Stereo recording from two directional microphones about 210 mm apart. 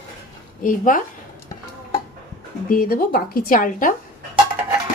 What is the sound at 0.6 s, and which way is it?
Speech, 40° left (ahead or behind).